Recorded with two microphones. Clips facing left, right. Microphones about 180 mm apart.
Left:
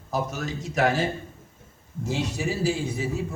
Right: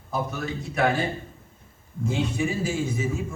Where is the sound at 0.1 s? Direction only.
40° left (ahead or behind).